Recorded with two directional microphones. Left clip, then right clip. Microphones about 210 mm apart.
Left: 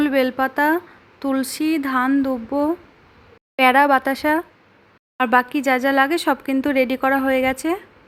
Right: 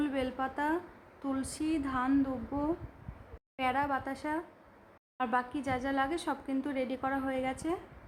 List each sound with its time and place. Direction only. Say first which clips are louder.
0.0 s speech: left 15 dB; 25° left (ahead or behind)